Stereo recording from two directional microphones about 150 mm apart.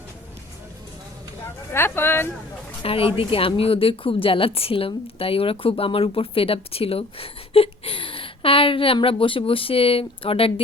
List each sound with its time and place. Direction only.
1.7 s speech: 15° left (ahead or behind)
2.8 s a woman's voice: 40° left (ahead or behind)